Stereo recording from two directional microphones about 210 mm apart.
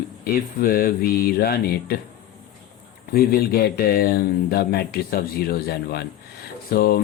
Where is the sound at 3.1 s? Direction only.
45° left (ahead or behind).